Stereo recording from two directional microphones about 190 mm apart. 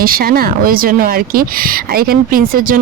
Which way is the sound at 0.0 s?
50° right (ahead or behind).